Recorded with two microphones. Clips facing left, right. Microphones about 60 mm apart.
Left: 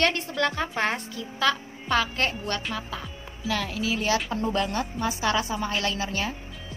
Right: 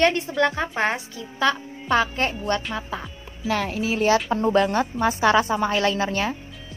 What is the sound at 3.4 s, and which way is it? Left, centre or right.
Speech, right.